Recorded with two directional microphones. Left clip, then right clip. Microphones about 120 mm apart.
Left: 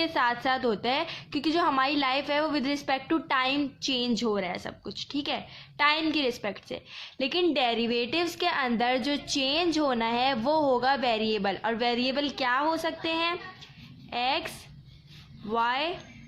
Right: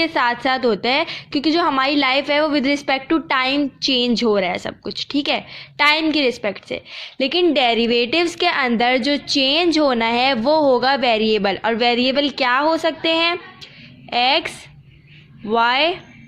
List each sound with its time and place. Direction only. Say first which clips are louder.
0.0 s a woman's voice: right 8 dB; 30° right (ahead or behind)